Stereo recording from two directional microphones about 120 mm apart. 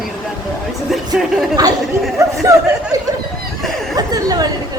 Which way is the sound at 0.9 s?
Centre (ahead or behind).